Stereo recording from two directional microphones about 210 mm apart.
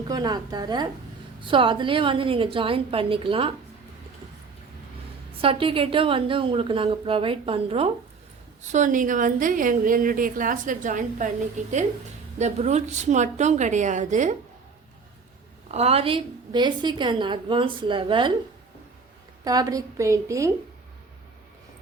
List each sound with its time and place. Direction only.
0.1 s a woman's voice: 20° right (ahead or behind)
5.4 s a woman's voice: 25° right (ahead or behind)
12.4 s a woman's voice: 35° right (ahead or behind)
15.7 s a woman's voice: 30° right (ahead or behind)
19.5 s a woman's voice: 15° right (ahead or behind)